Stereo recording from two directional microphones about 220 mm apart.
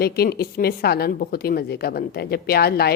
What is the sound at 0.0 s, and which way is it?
A woman's voice, 45° left (ahead or behind).